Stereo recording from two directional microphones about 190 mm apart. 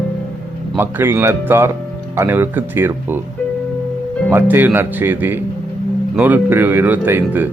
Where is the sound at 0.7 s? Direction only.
10° right (ahead or behind).